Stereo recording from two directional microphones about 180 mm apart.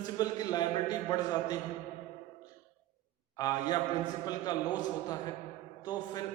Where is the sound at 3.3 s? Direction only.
20° left (ahead or behind).